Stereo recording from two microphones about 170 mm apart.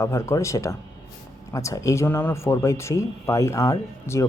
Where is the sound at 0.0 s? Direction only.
15° left (ahead or behind).